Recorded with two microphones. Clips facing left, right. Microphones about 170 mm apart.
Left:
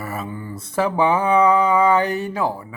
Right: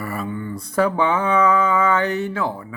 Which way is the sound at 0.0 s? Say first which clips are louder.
Right 2 dB; 5° left (ahead or behind).